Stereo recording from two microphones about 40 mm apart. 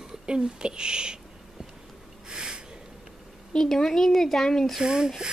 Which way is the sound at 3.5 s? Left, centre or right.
Centre.